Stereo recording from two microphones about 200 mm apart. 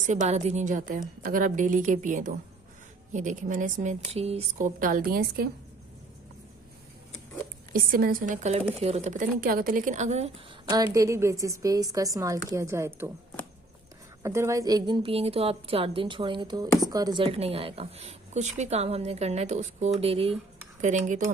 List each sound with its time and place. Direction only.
0.0 s a woman's voice: 35° right (ahead or behind)
7.7 s a woman's voice: 45° right (ahead or behind)
10.9 s a woman's voice: 15° right (ahead or behind)
14.2 s a woman's voice: 15° right (ahead or behind); by 21.3 s 35° right (ahead or behind)